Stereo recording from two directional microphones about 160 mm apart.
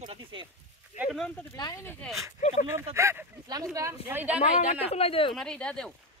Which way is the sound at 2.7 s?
15° right (ahead or behind).